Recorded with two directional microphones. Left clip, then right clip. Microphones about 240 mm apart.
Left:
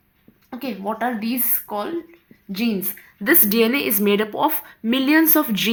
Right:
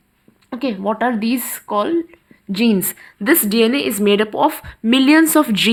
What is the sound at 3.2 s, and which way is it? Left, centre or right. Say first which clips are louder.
A woman's voice: right 3 dB; centre.